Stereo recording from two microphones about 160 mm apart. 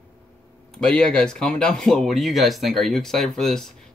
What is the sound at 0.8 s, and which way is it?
Speech, 5° left (ahead or behind).